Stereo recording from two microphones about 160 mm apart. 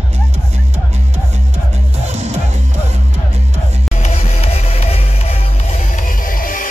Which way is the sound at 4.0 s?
40° left (ahead or behind).